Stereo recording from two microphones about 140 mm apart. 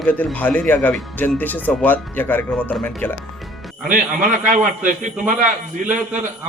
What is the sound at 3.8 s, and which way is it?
A man's voice, 80° right.